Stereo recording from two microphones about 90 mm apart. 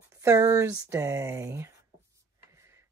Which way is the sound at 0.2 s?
40° right (ahead or behind).